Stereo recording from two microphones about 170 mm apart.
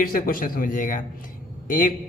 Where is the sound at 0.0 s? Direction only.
55° left (ahead or behind).